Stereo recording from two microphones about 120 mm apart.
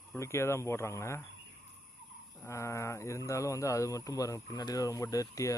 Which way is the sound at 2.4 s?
25° left (ahead or behind).